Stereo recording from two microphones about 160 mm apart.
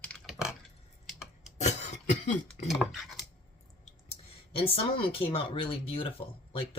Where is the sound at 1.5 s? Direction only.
45° left (ahead or behind).